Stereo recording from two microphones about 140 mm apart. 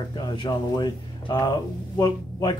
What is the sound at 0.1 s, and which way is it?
Speech, 30° left (ahead or behind).